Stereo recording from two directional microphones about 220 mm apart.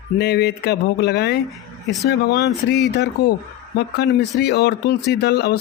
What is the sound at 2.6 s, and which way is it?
Speech, 50° left (ahead or behind).